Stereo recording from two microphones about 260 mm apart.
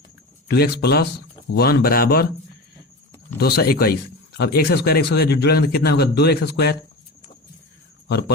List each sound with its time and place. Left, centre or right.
0.4 s a man's voice: left
3.3 s a man's voice: left